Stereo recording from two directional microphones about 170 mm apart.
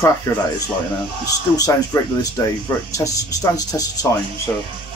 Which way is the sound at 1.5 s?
20° left (ahead or behind).